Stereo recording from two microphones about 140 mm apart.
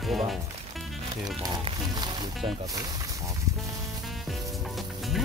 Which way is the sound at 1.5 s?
35° right (ahead or behind).